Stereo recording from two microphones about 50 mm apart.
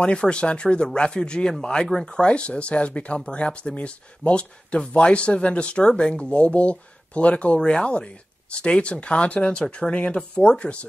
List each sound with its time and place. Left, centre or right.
0.0 s speech: centre